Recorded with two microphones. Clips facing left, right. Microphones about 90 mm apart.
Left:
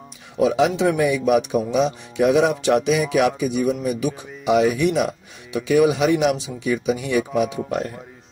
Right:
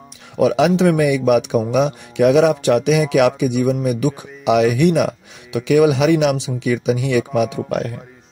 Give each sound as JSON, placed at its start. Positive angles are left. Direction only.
{"t": 0.4, "sound": "speech", "side_deg": -70}